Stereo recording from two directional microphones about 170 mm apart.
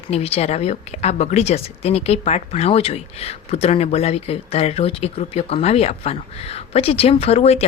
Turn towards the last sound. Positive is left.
turn(degrees=40)  # may be behind; listen again after turning